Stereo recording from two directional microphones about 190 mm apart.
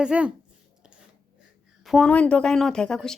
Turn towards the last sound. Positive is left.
turn(degrees=5)  # may be behind; listen again after turning